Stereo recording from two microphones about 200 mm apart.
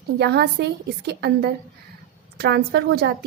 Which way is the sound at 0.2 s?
55° right (ahead or behind).